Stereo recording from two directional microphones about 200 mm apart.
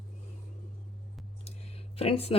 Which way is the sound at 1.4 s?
30° left (ahead or behind).